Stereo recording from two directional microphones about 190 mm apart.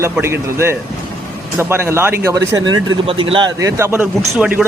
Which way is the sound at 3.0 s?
30° right (ahead or behind).